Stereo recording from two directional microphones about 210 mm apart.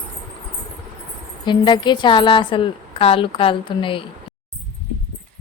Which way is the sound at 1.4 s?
20° left (ahead or behind).